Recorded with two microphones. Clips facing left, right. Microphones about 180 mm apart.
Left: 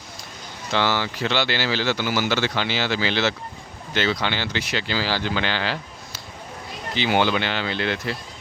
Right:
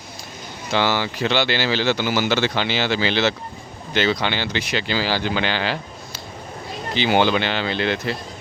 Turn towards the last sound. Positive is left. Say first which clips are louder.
# right 3 dB
turn(degrees=-25)  # may be behind; listen again after turning